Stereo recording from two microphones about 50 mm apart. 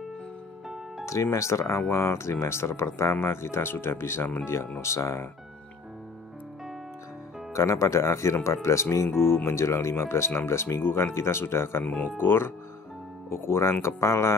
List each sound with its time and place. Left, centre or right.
1.0 s speech: left
4.8 s speech: left
7.5 s speech: left
9.2 s speech: left
10.8 s speech: left
12.2 s speech: left
13.3 s speech: left